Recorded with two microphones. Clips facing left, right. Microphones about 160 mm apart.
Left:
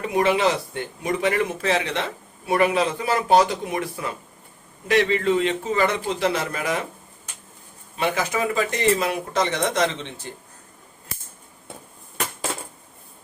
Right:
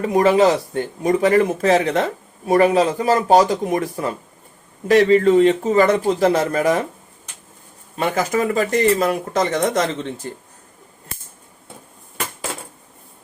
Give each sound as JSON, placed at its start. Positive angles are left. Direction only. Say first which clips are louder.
{"t": 0.0, "sound": "a man's voice", "louder": "right 6 dB", "side_deg": -40}
{"t": 7.9, "sound": "speech", "louder": "right 4 dB", "side_deg": -45}